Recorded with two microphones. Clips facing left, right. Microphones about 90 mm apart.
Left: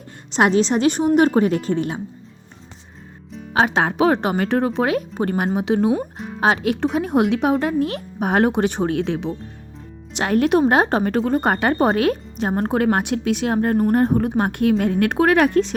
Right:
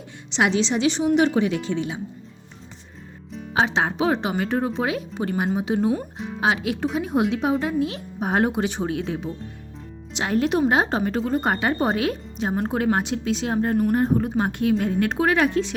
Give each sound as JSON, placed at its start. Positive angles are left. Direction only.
{"t": 0.3, "sound": "a woman's voice", "side_deg": 45}
{"t": 3.5, "sound": "speech", "side_deg": 55}
{"t": 6.4, "sound": "a woman's voice", "side_deg": 50}
{"t": 10.6, "sound": "speech", "side_deg": 50}